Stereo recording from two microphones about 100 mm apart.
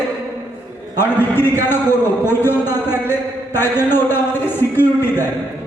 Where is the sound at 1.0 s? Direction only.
20° left (ahead or behind).